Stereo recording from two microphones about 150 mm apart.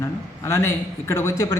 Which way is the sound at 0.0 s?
20° left (ahead or behind).